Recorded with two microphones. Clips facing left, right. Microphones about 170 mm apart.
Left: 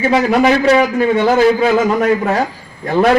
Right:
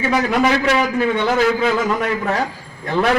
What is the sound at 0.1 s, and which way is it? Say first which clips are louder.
A man's voice: left 4 dB; 35° left (ahead or behind).